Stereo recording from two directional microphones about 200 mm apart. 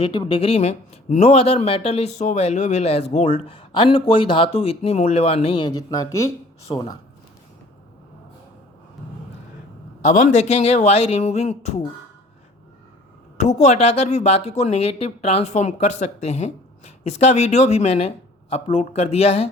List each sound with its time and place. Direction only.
0.0 s speech: 25° left (ahead or behind)
10.1 s speech: 35° left (ahead or behind)
13.3 s speech: 35° left (ahead or behind)